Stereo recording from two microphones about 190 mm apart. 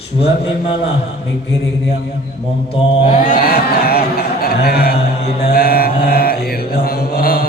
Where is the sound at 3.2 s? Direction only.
50° left (ahead or behind).